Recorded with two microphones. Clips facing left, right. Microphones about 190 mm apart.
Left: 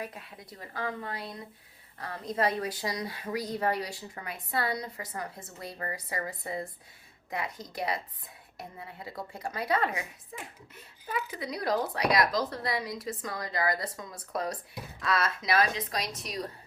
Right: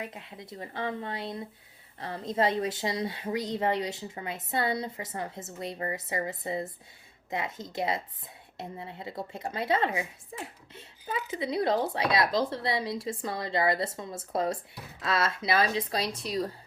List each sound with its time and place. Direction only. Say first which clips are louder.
0.0 s a woman's voice: right 1 dB; 20° right (ahead or behind)